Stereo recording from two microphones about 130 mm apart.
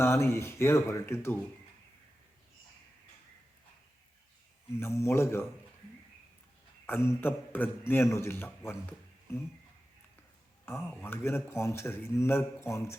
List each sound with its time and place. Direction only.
0.0 s speech: 20° left (ahead or behind)
4.8 s speech: 20° left (ahead or behind)
6.8 s a man's voice: 20° left (ahead or behind)
10.7 s a man's voice: 15° left (ahead or behind)